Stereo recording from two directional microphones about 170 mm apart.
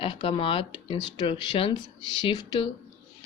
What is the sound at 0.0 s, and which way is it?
Speech, 30° left (ahead or behind).